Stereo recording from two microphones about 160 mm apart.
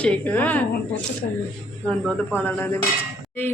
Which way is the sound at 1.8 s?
5° left (ahead or behind).